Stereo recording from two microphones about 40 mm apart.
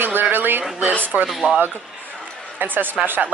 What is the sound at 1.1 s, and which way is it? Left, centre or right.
Speech, right.